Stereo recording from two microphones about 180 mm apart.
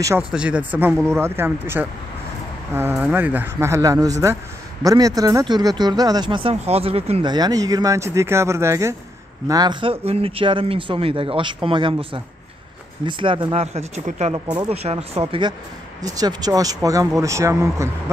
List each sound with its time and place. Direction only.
0.2 s speech: 5° right (ahead or behind); by 14.3 s 40° right (ahead or behind)
14.3 s speech: 25° right (ahead or behind)
14.8 s speech: 35° right (ahead or behind)
16.0 s speech: 20° right (ahead or behind)